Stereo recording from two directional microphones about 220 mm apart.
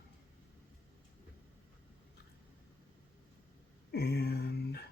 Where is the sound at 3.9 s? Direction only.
50° left (ahead or behind).